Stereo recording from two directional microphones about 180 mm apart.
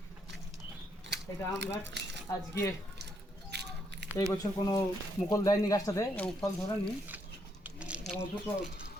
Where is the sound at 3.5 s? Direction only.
65° right (ahead or behind).